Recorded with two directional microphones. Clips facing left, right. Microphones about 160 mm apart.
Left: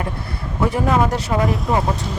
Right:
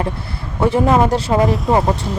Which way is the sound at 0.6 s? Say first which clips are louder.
Right 4 dB; 25° right (ahead or behind).